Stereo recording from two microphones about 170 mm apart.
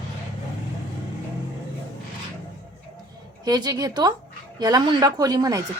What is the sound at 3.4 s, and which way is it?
A woman's voice, 25° right (ahead or behind).